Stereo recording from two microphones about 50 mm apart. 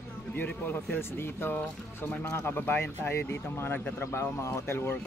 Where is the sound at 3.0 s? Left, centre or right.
Left.